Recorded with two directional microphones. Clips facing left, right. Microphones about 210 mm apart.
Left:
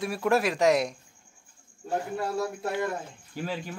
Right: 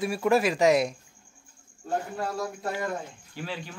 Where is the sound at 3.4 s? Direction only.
45° left (ahead or behind).